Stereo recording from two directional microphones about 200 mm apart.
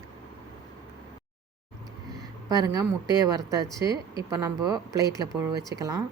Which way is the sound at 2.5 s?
20° right (ahead or behind).